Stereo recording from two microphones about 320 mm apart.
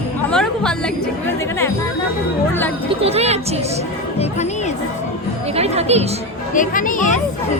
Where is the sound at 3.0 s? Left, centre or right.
Centre.